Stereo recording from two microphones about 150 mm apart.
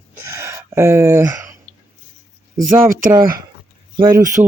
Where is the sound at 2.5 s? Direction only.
60° right (ahead or behind).